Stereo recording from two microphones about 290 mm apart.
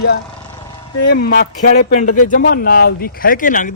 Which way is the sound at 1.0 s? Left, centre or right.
Left.